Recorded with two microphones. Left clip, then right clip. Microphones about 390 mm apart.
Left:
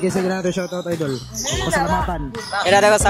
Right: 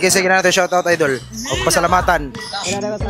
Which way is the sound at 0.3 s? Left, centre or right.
Right.